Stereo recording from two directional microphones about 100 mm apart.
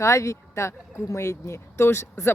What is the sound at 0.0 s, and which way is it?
Speech, 30° left (ahead or behind).